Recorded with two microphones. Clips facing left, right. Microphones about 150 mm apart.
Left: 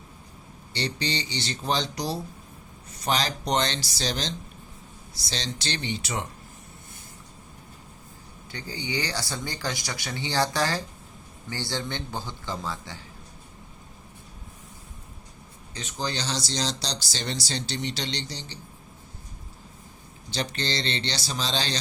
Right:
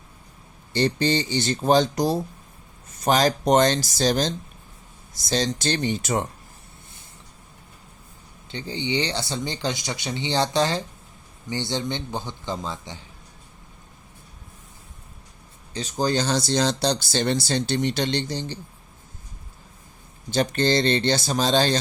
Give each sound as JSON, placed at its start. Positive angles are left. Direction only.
{"t": 0.7, "sound": "speech", "side_deg": -50}
{"t": 8.4, "sound": "speech", "side_deg": -25}
{"t": 15.7, "sound": "speech", "side_deg": -35}
{"t": 20.3, "sound": "speech", "side_deg": -50}